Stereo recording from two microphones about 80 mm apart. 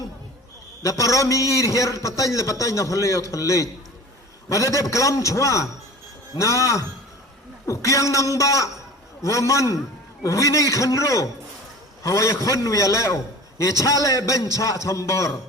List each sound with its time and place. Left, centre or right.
0.8 s a man's voice: left